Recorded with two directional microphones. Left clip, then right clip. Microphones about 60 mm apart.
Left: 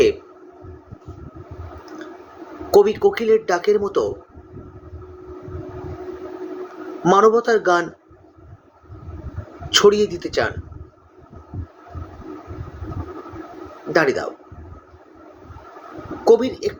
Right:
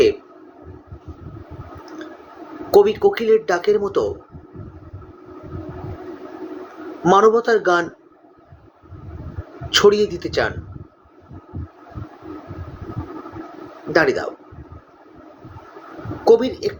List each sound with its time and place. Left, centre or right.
1.8 s squish: centre
2.6 s speech: centre
7.0 s speech: centre
9.6 s speech: centre
13.9 s speech: centre
16.2 s speech: centre